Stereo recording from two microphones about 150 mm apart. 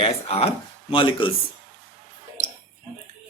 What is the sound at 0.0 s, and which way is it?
Speech, 40° left (ahead or behind).